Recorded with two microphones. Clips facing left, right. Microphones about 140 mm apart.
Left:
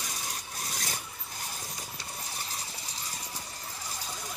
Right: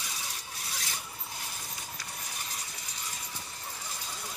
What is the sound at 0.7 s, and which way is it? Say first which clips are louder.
Zipper: left 2 dB; 45° left (ahead or behind).